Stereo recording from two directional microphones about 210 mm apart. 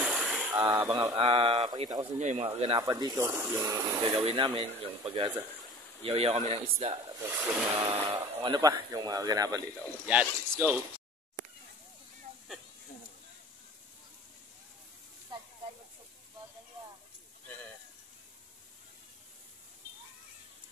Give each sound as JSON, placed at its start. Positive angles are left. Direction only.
{"t": 0.0, "sound": "a sound", "side_deg": -5}
{"t": 0.5, "sound": "speech", "side_deg": -10}
{"t": 1.1, "sound": "speech", "side_deg": -25}
{"t": 2.1, "sound": "speech", "side_deg": -30}
{"t": 2.8, "sound": "speech", "side_deg": -20}
{"t": 4.0, "sound": "speech", "side_deg": -25}
{"t": 10.0, "sound": "speech", "side_deg": -5}
{"t": 15.3, "sound": "hiss", "side_deg": -20}